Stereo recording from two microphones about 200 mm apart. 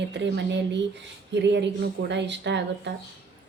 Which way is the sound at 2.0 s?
60° right (ahead or behind).